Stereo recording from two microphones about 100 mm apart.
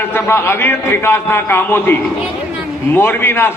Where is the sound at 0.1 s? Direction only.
25° left (ahead or behind).